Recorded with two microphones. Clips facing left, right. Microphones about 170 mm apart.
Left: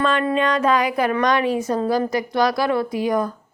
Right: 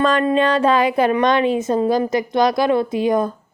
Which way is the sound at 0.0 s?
40° right (ahead or behind).